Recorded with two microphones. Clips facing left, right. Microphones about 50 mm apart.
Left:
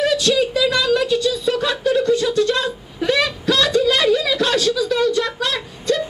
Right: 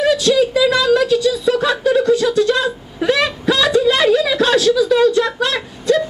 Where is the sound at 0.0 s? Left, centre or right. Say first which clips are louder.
Right 3 dB; centre.